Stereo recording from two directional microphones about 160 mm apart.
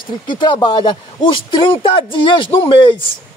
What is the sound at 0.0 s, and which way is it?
Speech, 30° left (ahead or behind).